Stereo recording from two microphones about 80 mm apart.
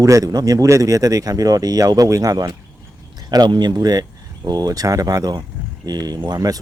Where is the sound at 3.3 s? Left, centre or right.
Right.